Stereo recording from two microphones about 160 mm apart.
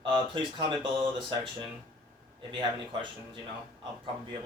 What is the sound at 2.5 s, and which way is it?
Speech, 30° right (ahead or behind).